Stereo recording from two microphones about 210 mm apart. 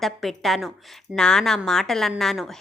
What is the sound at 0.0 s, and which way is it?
A woman's voice, centre (ahead or behind).